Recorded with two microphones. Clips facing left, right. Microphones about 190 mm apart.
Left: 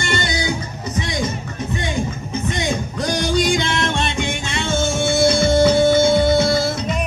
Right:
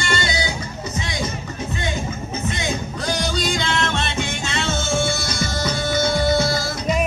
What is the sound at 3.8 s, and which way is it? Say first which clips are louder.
Music: left 2 dB; 15° left (ahead or behind).